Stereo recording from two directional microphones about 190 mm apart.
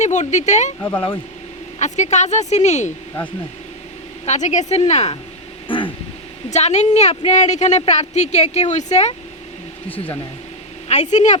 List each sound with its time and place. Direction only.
0.0 s a woman's voice: 40° left (ahead or behind)
0.8 s speech: 10° left (ahead or behind)
1.8 s a woman's voice: 40° left (ahead or behind)
4.3 s a woman's voice: 40° left (ahead or behind)
5.6 s a sound: 25° left (ahead or behind)
6.5 s a woman's voice: 35° left (ahead or behind)
10.8 s a woman's voice: 35° left (ahead or behind)